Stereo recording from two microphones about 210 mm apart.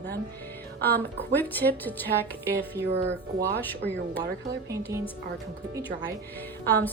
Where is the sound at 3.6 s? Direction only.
10° left (ahead or behind).